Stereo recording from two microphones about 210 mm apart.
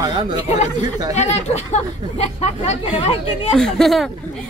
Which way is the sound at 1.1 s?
35° left (ahead or behind).